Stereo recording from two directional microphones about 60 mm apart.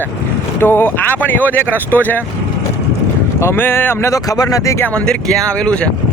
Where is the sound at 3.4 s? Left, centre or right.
Left.